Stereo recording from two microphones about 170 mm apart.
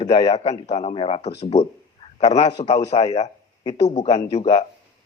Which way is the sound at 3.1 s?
40° left (ahead or behind).